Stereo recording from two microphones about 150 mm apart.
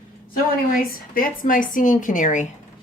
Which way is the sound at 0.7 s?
70° left (ahead or behind).